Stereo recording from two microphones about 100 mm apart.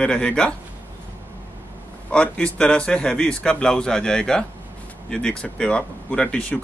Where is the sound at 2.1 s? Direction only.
10° left (ahead or behind).